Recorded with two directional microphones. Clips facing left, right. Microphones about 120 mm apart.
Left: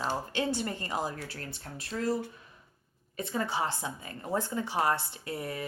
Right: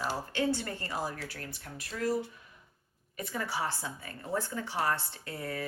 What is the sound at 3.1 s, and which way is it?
Speech, 25° left (ahead or behind).